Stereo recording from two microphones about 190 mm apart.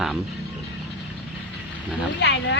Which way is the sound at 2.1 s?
65° left (ahead or behind).